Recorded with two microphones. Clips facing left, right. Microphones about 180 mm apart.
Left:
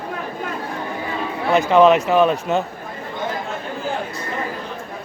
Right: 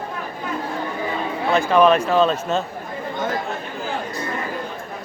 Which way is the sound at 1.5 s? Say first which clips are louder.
Left 2 dB; 20° left (ahead or behind).